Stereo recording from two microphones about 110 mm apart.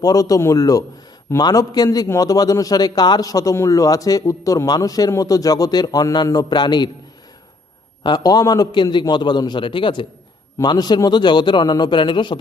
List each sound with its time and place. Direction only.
0.0 s a man's voice: 35° left (ahead or behind)
8.0 s a man's voice: 40° left (ahead or behind)
10.6 s a man's voice: 40° left (ahead or behind)